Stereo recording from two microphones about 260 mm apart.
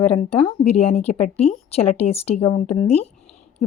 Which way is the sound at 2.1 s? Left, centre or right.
Left.